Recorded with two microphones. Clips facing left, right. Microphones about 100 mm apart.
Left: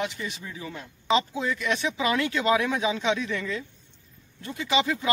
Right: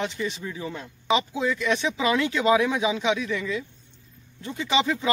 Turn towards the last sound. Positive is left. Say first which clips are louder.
# right 1 dB
turn(degrees=-25)  # may be behind; listen again after turning